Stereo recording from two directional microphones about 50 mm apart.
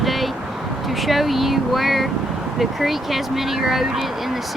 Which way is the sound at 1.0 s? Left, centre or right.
Centre.